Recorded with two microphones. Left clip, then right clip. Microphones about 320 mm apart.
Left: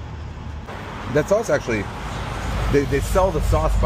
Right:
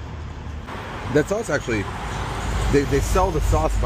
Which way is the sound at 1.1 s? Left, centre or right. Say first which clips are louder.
Left 3 dB; centre.